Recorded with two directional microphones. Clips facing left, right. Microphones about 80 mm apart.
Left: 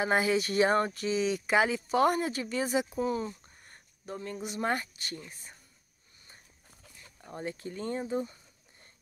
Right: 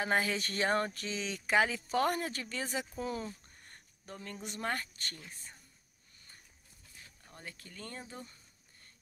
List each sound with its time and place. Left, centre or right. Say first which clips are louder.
0.0 s speech: left 5 dB; centre
7.2 s speech: left 13 dB; left